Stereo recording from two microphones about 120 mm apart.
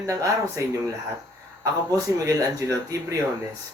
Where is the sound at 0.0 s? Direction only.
25° right (ahead or behind).